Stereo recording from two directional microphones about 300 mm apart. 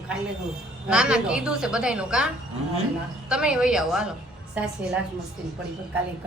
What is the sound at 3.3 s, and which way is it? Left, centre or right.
A woman's voice, centre.